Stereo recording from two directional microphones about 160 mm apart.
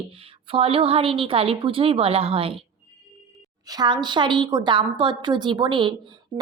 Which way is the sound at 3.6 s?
25° right (ahead or behind).